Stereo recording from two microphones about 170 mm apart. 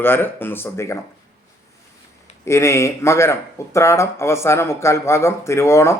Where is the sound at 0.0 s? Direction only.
10° left (ahead or behind).